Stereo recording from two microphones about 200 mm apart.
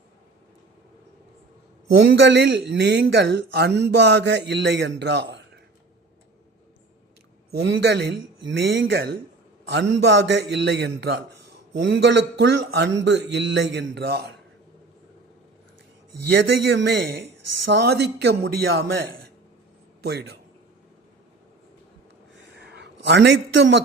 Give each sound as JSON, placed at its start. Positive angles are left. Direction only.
{"t": 2.1, "sound": "a man's voice", "side_deg": -60}
{"t": 7.5, "sound": "a man's voice", "side_deg": -55}
{"t": 16.3, "sound": "a man's voice", "side_deg": -65}
{"t": 22.5, "sound": "a sound", "side_deg": -60}